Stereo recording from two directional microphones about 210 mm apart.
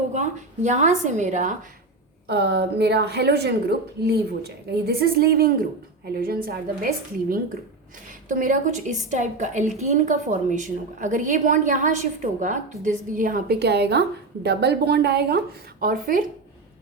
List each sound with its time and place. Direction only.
0.1 s a woman's voice: 35° right (ahead or behind)
2.2 s a woman's voice: 50° right (ahead or behind)